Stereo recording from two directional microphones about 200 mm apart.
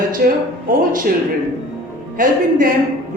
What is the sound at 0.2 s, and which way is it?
Speech, 50° right (ahead or behind).